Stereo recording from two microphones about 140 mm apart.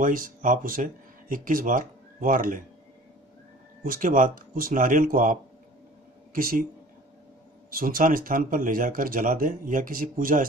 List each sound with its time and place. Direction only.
0.0 s speech: 75° right (ahead or behind)
3.8 s speech: 85° right
6.3 s speech: 90° right
7.7 s speech: 85° right